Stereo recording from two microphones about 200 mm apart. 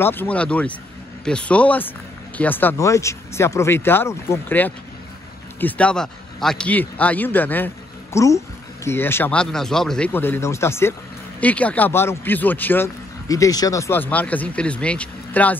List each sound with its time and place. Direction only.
0.0 s a man's voice: 10° left (ahead or behind)